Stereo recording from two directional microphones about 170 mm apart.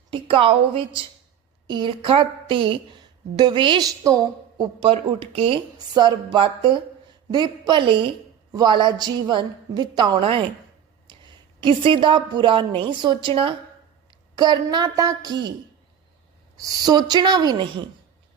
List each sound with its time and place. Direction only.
0.1 s a woman's voice: 30° right (ahead or behind)
16.6 s a woman's voice: 20° right (ahead or behind)